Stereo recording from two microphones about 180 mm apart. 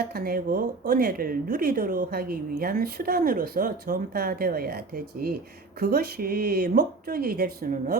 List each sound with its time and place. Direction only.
0.0 s speech: 55° right (ahead or behind)
5.8 s speech: 55° right (ahead or behind)